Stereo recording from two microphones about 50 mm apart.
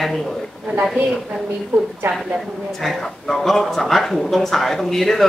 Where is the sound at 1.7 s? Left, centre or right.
Right.